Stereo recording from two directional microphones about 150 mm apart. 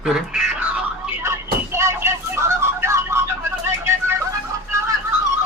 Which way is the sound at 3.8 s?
15° right (ahead or behind).